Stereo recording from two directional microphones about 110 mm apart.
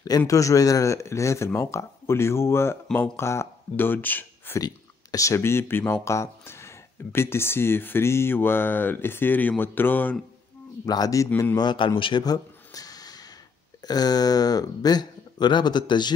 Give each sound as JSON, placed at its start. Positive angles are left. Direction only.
{"t": 0.3, "sound": "speech", "side_deg": 30}
{"t": 4.6, "sound": "speech", "side_deg": 35}
{"t": 10.9, "sound": "a man's voice", "side_deg": 35}
{"t": 12.0, "sound": "a sound", "side_deg": 40}
{"t": 13.8, "sound": "speech", "side_deg": 35}